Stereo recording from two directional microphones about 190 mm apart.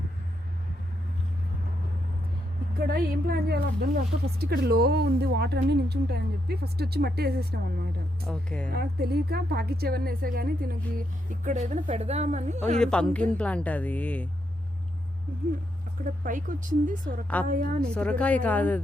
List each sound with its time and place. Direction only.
2.7 s a woman's voice: 55° right (ahead or behind)
8.2 s speech: 5° left (ahead or behind)
8.7 s a woman's voice: 55° right (ahead or behind); by 12.5 s 35° right (ahead or behind)
12.8 s a woman's voice: 5° left (ahead or behind)
16.2 s a woman's voice: 45° right (ahead or behind)
17.9 s a woman's voice: 5° left (ahead or behind)